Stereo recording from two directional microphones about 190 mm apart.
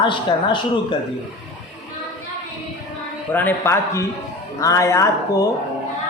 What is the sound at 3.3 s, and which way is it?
Speech, 10° left (ahead or behind).